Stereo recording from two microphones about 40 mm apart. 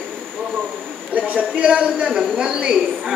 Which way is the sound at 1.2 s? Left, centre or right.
Right.